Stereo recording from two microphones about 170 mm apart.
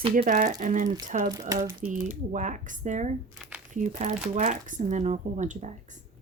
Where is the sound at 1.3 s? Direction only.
20° right (ahead or behind).